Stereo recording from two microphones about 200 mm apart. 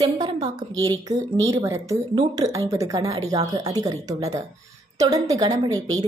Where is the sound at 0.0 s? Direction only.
25° right (ahead or behind).